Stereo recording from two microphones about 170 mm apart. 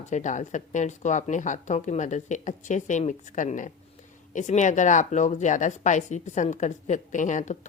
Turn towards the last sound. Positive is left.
turn(degrees=45)  # may be behind; listen again after turning